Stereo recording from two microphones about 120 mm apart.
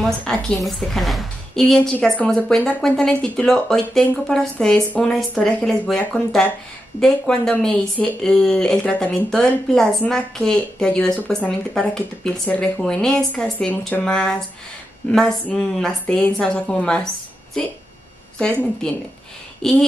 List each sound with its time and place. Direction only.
0.2 s a woman's voice: 5° left (ahead or behind)
19.6 s a woman's voice: 5° left (ahead or behind)